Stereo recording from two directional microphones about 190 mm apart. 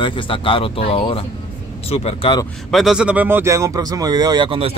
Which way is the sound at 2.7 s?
Centre (ahead or behind).